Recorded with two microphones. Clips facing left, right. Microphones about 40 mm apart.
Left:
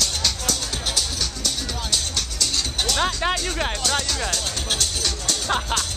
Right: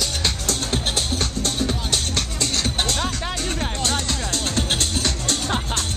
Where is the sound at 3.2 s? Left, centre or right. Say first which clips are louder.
Left 6 dB; left.